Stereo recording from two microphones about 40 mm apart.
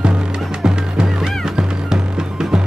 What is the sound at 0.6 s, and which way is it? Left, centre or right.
Music, centre.